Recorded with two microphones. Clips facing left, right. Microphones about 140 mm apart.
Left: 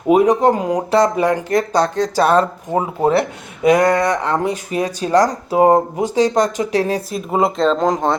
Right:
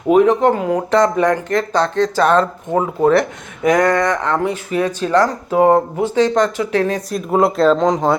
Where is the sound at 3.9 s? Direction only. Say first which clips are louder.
Even; 15° left (ahead or behind).